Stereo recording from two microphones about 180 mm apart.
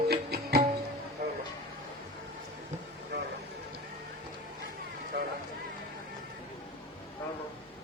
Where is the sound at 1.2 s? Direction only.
60° right (ahead or behind).